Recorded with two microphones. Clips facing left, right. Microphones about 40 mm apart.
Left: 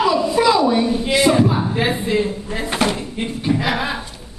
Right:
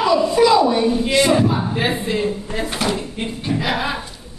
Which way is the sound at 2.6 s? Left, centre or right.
Left.